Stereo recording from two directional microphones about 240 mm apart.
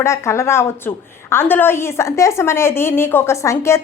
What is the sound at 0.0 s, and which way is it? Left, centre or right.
A woman's voice, centre.